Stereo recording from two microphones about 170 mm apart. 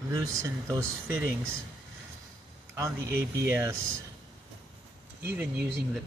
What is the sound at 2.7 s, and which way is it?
Speech, 15° right (ahead or behind).